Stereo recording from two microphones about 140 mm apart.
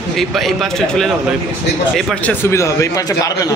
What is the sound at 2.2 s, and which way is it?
A man's voice, 15° left (ahead or behind).